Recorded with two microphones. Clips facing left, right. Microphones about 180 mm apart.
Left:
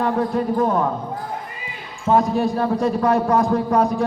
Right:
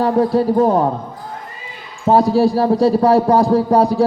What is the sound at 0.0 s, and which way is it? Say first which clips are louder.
Speech: right 6 dB; 35° right (ahead or behind).